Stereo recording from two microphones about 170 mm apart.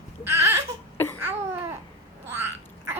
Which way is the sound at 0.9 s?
10° left (ahead or behind).